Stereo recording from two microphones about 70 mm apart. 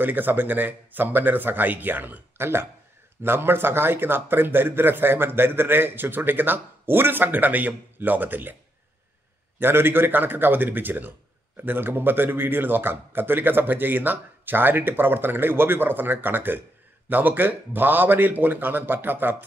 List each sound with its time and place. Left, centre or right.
0.0 s speech: right
9.6 s speech: right